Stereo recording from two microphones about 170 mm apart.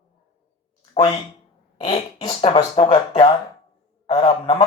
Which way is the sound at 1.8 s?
30° left (ahead or behind).